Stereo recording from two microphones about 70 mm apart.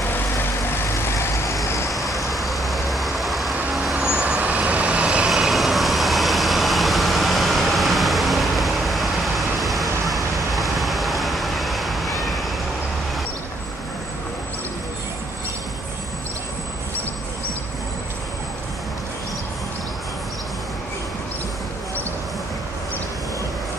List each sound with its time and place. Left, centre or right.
0.0 s vehicle: left
1.9 s vehicle: centre
3.9 s vehicle: centre
5.3 s vehicle: centre